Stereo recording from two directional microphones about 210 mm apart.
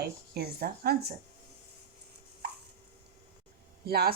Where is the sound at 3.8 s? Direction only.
50° right (ahead or behind).